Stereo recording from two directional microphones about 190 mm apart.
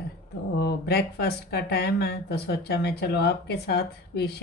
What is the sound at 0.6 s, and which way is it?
Speech, 55° left (ahead or behind).